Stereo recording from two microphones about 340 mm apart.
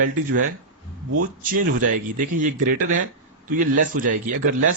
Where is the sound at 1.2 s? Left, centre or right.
Right.